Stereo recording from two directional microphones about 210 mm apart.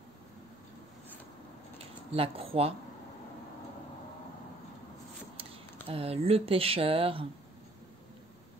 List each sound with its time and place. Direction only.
1.8 s speech: 25° right (ahead or behind)
5.4 s speech: 25° right (ahead or behind)